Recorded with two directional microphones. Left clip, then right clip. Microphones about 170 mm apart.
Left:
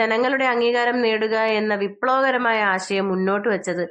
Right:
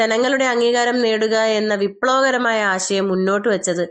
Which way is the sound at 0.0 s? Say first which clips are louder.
Right 2 dB; 30° right (ahead or behind).